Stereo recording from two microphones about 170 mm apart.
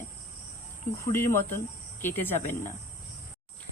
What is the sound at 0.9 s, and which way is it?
Speech, 15° left (ahead or behind).